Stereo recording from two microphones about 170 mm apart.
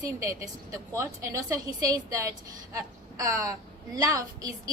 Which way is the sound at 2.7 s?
20° right (ahead or behind).